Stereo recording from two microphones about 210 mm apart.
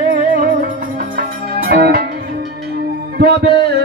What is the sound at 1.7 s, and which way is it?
Music, 45° right (ahead or behind).